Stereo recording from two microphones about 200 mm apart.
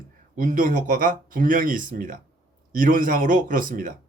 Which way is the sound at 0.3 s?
45° right (ahead or behind).